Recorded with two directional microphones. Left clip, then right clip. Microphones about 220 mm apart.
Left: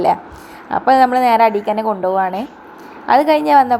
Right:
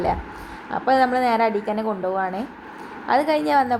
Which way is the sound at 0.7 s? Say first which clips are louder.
Left 7 dB; 20° left (ahead or behind).